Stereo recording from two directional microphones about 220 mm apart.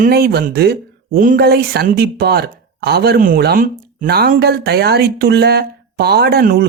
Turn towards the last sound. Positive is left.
turn(degrees=-45)  # may be behind; listen again after turning